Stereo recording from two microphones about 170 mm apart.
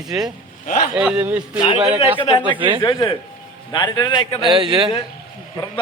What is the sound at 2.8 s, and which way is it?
A man's voice, 30° left (ahead or behind).